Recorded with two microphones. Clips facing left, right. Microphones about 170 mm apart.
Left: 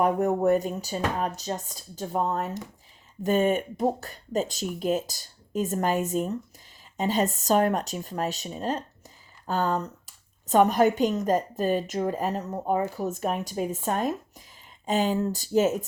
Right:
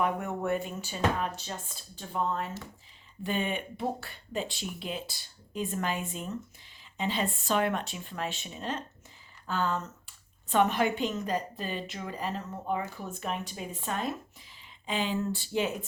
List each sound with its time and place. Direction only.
0.0 s speech: 40° left (ahead or behind)